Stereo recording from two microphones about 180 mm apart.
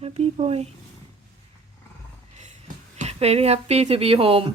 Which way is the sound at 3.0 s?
35° right (ahead or behind).